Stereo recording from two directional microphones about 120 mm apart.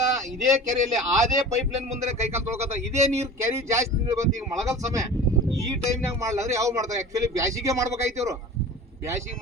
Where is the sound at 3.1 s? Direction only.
20° right (ahead or behind).